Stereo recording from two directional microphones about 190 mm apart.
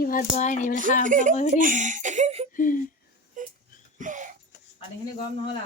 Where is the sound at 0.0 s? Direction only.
50° left (ahead or behind).